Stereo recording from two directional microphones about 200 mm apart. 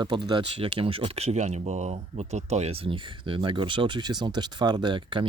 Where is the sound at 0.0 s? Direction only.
25° right (ahead or behind).